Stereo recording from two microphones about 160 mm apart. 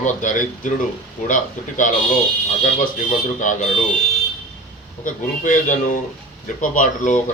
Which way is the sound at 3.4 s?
50° left (ahead or behind).